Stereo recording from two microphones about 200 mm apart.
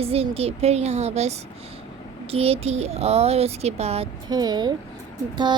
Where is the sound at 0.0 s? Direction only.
30° right (ahead or behind).